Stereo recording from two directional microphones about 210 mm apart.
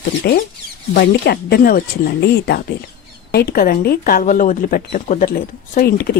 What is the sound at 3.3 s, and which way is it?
Speech, 45° left (ahead or behind).